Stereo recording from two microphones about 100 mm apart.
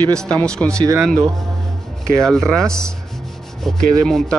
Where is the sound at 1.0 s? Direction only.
5° left (ahead or behind).